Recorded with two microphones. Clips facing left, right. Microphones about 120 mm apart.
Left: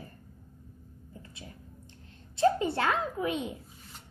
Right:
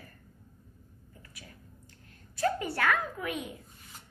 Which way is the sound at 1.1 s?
25° left (ahead or behind).